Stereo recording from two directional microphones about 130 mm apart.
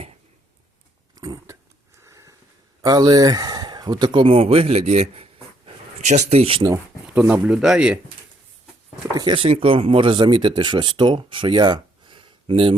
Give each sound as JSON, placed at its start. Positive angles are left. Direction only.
{"t": 1.1, "sound": "a sound", "side_deg": -30}
{"t": 2.0, "sound": "sniff", "side_deg": -25}
{"t": 2.8, "sound": "speech", "side_deg": -30}
{"t": 7.1, "sound": "speech", "side_deg": -10}
{"t": 9.1, "sound": "speech", "side_deg": -40}